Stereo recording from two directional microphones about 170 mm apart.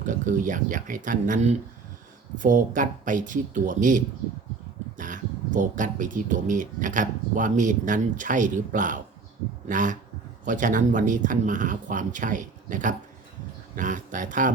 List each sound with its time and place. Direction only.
0.0 s speech: 50° right (ahead or behind)